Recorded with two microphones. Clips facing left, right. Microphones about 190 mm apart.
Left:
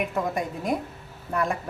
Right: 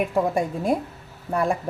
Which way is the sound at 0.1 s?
30° right (ahead or behind).